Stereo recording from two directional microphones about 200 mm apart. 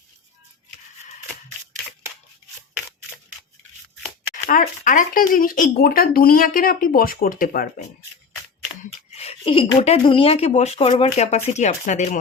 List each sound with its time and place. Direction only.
4.4 s speech: 45° left (ahead or behind)
9.1 s speech: 30° left (ahead or behind)